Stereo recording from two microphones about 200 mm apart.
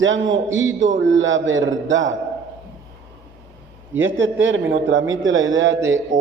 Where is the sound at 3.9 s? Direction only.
70° right (ahead or behind).